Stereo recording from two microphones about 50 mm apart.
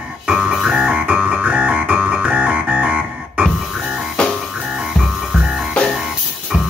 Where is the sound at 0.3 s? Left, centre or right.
Centre.